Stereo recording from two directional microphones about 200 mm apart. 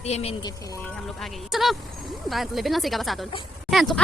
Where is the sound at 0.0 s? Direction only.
30° left (ahead or behind).